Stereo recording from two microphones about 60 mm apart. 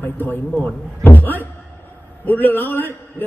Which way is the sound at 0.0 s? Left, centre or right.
Left.